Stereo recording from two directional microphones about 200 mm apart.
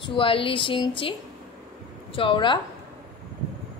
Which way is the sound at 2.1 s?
25° left (ahead or behind).